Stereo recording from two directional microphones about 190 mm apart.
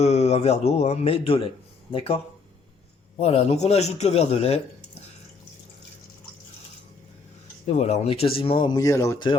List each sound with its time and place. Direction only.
0.0 s speech: 35° left (ahead or behind)
7.7 s speech: 35° left (ahead or behind); by 9.3 s 20° left (ahead or behind)